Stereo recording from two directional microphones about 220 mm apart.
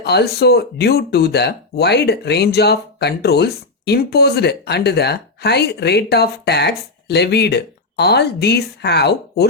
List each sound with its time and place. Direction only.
0.0 s speech: 50° left (ahead or behind)